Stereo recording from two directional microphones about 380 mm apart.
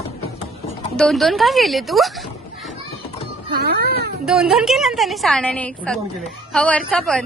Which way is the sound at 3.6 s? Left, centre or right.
Right.